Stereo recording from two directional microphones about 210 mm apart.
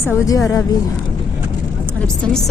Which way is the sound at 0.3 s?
15° left (ahead or behind).